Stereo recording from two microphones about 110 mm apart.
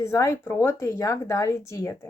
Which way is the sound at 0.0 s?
25° left (ahead or behind).